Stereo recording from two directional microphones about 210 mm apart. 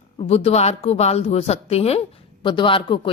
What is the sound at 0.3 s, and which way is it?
A woman's voice, 30° left (ahead or behind).